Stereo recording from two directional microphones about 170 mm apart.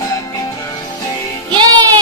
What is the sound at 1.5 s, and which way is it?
Music, 25° right (ahead or behind).